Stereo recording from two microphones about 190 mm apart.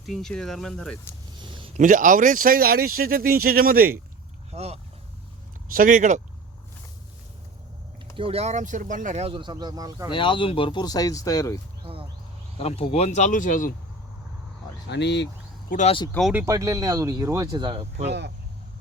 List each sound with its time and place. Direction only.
0.0 s speech: centre (ahead or behind)
1.4 s a sound: 25° right (ahead or behind)
1.8 s speech: 45° right (ahead or behind)
4.5 s speech: 35° right (ahead or behind)
5.7 s speech: 45° right (ahead or behind)
8.1 s speech: 30° right (ahead or behind)
10.1 s speech: 25° left (ahead or behind)
11.8 s a sound: 30° right (ahead or behind)
12.5 s speech: 30° left (ahead or behind)
14.8 s speech: 65° left (ahead or behind)
15.7 s speech: 35° left (ahead or behind)
16.3 s speech: 10° right (ahead or behind); by 18.0 s 30° right (ahead or behind)
18.0 s speech: 60° right (ahead or behind)